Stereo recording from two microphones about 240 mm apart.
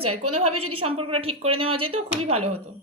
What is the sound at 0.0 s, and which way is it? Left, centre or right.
Speech, right.